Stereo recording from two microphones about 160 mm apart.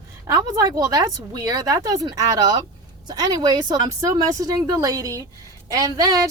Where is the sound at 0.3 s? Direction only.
20° right (ahead or behind).